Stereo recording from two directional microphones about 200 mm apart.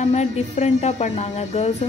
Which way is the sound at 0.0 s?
35° left (ahead or behind).